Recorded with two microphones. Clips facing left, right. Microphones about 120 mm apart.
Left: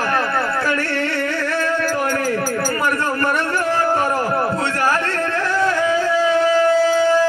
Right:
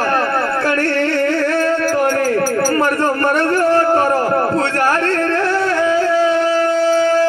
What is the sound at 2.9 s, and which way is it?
A man's voice, 35° right (ahead or behind).